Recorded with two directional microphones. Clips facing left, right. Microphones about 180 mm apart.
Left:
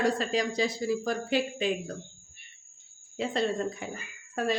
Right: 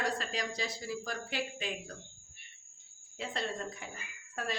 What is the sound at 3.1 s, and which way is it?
Speech, 20° left (ahead or behind).